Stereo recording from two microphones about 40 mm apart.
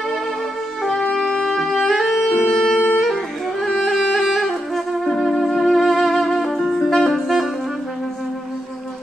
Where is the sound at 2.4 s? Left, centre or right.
Centre.